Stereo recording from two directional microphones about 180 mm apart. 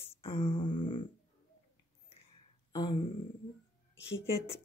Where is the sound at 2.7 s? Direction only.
25° left (ahead or behind).